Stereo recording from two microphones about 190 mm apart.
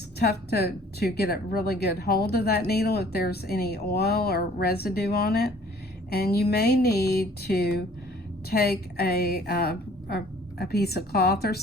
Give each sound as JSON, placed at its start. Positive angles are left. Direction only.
{"t": 0.2, "sound": "a woman's voice", "side_deg": 55}